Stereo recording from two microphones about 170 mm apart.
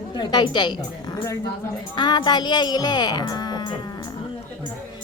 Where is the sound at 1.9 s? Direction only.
25° left (ahead or behind).